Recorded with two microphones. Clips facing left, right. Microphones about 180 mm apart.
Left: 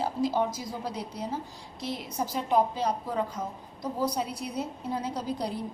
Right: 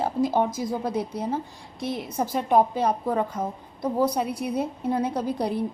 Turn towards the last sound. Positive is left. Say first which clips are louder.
# right 6 dB
turn(degrees=-60)  # may be behind; listen again after turning